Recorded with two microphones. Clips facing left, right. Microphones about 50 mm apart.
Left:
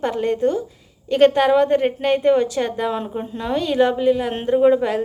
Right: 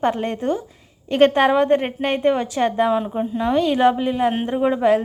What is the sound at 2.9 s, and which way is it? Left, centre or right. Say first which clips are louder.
Speech: right 4 dB; centre.